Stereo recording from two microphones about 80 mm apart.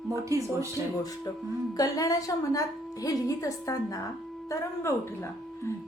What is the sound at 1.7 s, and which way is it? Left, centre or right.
A woman's voice, left.